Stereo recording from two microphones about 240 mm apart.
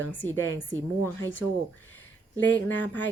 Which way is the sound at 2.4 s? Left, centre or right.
Left.